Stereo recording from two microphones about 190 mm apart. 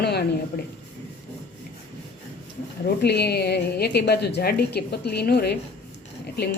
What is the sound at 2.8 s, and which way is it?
A woman's voice, 60° left (ahead or behind).